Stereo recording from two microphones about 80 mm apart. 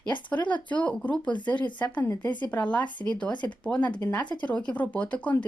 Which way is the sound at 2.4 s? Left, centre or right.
Centre.